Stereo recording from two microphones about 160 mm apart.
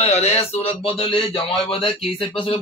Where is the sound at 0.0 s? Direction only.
40° left (ahead or behind).